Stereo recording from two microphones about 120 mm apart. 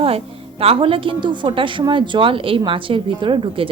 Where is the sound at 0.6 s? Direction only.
50° right (ahead or behind).